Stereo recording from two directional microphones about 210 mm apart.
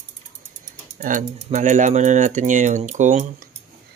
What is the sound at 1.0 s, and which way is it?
Speech, 35° right (ahead or behind).